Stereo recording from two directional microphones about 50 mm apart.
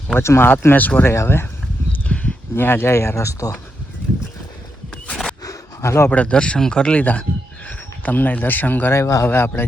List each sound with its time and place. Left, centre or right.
0.2 s speech: left
1.0 s speech: left
1.9 s horse: left
2.6 s speech: left
5.0 s a sound: centre
5.8 s speech: left
6.1 s speech: left
8.9 s a man's voice: left
9.2 s speech: left